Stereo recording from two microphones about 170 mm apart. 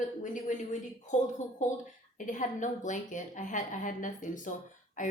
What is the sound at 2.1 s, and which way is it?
A woman's voice, 50° left (ahead or behind).